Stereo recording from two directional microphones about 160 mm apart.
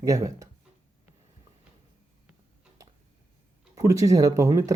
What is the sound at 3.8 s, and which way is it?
Speech, 20° right (ahead or behind).